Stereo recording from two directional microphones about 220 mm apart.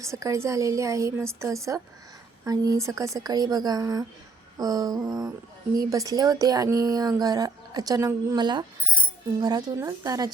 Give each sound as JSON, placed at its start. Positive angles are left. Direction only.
{"t": 0.0, "sound": "speech", "side_deg": -15}